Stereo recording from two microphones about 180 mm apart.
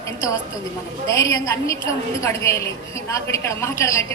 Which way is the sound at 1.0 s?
20° left (ahead or behind).